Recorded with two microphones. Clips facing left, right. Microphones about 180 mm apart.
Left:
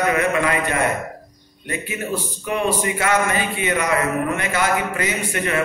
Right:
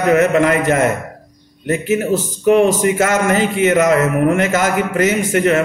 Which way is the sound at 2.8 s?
45° right (ahead or behind).